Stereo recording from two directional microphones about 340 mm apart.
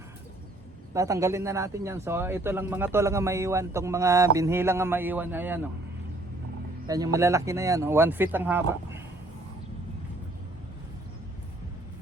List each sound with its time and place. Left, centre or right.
0.9 s speech: centre
6.8 s speech: centre